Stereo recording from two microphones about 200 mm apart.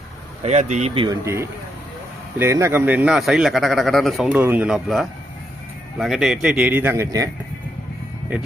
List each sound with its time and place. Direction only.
0.4 s speech: 35° right (ahead or behind); by 7.3 s 15° right (ahead or behind)